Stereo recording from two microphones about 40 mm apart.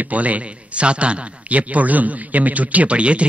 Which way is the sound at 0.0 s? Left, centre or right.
Right.